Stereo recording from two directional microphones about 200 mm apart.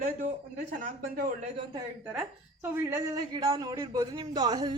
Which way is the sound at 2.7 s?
10° right (ahead or behind).